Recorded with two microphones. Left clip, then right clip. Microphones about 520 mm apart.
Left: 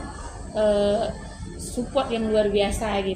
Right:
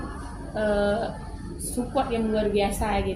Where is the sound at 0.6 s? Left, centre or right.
Right.